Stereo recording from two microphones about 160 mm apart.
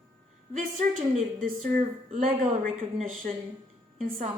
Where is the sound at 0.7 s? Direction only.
40° right (ahead or behind).